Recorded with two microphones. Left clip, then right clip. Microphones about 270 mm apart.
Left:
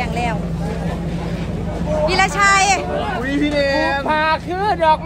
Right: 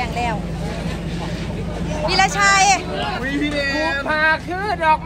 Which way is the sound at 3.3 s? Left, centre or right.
Left.